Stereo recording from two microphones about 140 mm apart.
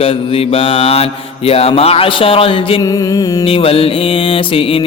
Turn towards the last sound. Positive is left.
turn(degrees=40)  # may be behind; listen again after turning